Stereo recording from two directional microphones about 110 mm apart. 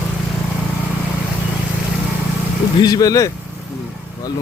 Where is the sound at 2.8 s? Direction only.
35° left (ahead or behind).